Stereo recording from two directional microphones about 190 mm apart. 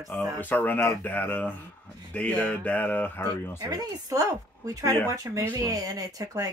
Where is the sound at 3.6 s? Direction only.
20° right (ahead or behind).